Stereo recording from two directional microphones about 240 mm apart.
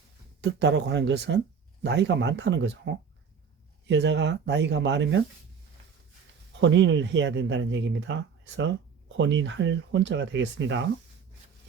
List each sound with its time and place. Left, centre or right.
0.4 s speech: right
6.6 s speech: right